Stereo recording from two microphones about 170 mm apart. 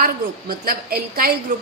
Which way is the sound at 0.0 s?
60° right (ahead or behind).